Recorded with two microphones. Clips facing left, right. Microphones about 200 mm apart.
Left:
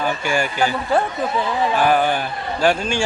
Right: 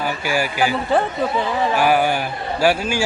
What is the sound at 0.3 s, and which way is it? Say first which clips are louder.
A man's voice: right 2 dB; 5° right (ahead or behind).